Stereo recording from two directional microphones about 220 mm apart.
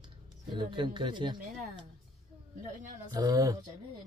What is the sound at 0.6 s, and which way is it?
Speech, 20° right (ahead or behind).